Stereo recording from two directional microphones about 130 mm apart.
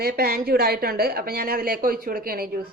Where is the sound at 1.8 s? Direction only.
90° right.